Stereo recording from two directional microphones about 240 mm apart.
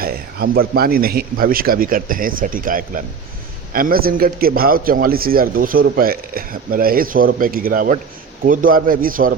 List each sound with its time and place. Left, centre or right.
0.0 s a man's voice: right